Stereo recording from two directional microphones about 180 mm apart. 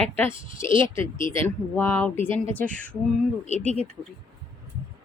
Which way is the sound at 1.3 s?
10° left (ahead or behind).